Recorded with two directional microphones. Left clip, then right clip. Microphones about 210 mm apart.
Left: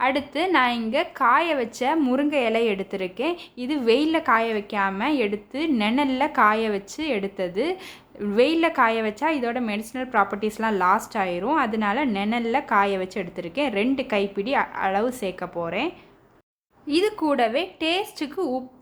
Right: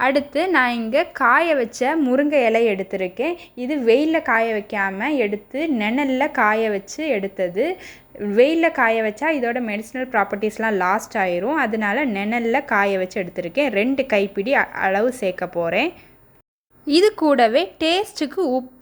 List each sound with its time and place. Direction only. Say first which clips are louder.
0.0 s a woman's voice: right 4 dB; 20° right (ahead or behind)